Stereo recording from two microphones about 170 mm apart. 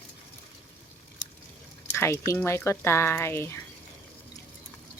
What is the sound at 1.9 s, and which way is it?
Speech, 15° left (ahead or behind).